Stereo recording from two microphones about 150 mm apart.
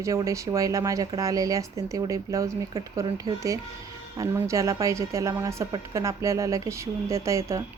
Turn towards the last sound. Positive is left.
turn(degrees=-20)  # may be behind; listen again after turning